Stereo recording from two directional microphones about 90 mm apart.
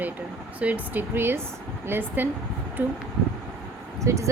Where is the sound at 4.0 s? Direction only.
35° right (ahead or behind).